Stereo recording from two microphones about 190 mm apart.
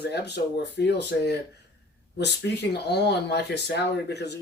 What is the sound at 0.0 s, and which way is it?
Speech, 60° left (ahead or behind).